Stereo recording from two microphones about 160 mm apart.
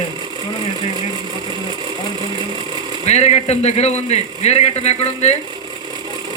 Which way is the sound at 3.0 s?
40° left (ahead or behind).